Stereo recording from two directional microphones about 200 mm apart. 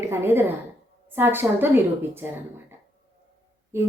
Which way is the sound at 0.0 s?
10° right (ahead or behind).